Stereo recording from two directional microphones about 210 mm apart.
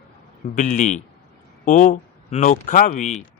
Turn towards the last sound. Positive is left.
turn(degrees=35)  # may be behind; listen again after turning